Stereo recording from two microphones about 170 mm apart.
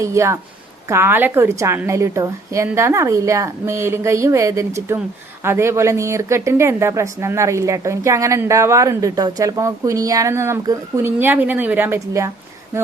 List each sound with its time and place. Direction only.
0.0 s speech: 15° right (ahead or behind)